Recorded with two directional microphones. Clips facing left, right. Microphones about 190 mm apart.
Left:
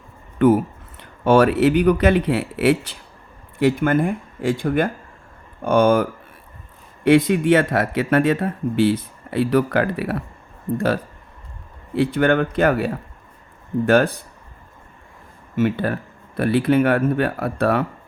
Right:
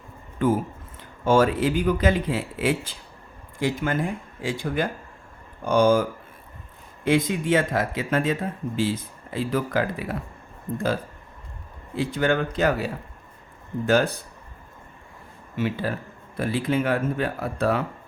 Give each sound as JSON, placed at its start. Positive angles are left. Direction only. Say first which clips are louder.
{"t": 0.3, "sound": "speech", "louder": "left 7 dB", "side_deg": 65}
{"t": 15.5, "sound": "speech", "louder": "left 6 dB", "side_deg": 55}